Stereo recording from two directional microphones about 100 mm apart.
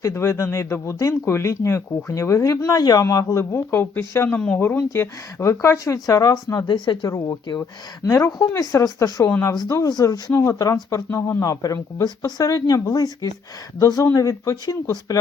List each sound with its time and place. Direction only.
0.0 s speech: 25° left (ahead or behind)
3.5 s speech: 25° left (ahead or behind)
4.4 s speech: 10° left (ahead or behind)
4.8 s speech: 30° left (ahead or behind); by 6.7 s 45° left (ahead or behind)
7.6 s speech: 30° left (ahead or behind)
8.3 s speech: 40° left (ahead or behind)